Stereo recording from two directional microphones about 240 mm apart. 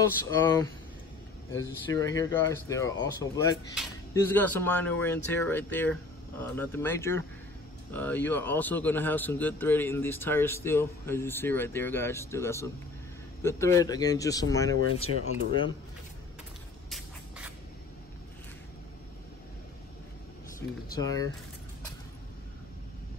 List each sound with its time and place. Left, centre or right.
0.3 s a man's voice: centre
15.0 s speech: left
21.0 s a man's voice: centre